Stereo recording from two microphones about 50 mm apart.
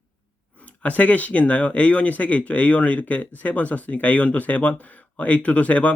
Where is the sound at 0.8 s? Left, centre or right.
Left.